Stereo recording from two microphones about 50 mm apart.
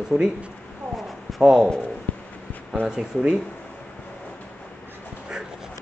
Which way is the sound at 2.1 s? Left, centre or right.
Left.